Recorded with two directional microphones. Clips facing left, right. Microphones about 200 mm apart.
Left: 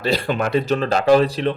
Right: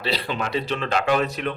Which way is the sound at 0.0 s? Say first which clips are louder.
Left 6 dB; 45° left (ahead or behind).